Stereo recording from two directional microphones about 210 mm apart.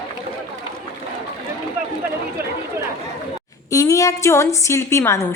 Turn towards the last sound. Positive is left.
turn(degrees=15)  # may be behind; listen again after turning